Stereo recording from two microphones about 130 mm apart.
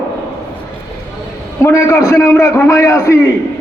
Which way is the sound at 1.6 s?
20° left (ahead or behind).